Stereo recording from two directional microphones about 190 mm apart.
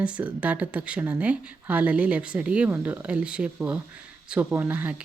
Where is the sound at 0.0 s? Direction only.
5° right (ahead or behind).